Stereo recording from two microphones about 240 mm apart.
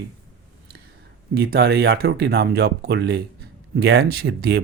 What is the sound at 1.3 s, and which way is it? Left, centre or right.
Speech, right.